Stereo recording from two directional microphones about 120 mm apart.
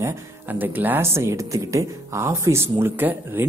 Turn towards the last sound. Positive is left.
turn(degrees=-15)  # may be behind; listen again after turning